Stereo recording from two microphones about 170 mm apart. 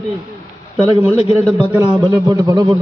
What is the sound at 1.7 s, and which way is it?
Speech, 10° right (ahead or behind).